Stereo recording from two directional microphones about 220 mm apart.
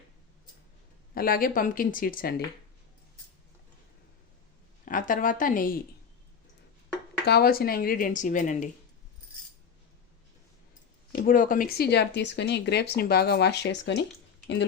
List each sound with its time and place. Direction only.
1.1 s speech: 40° left (ahead or behind)
4.9 s a woman's voice: 35° left (ahead or behind)
7.3 s speech: 45° left (ahead or behind)
11.1 s speech: 40° left (ahead or behind)